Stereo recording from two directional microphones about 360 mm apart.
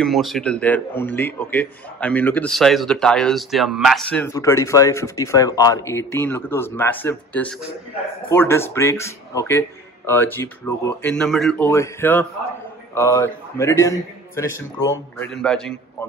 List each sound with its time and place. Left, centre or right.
0.0 s a man's voice: centre